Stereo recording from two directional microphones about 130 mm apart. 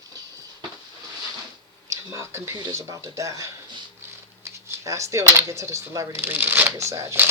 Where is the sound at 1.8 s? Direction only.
25° right (ahead or behind).